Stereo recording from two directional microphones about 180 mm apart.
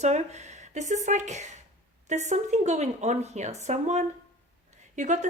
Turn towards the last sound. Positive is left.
turn(degrees=-40)  # may be behind; listen again after turning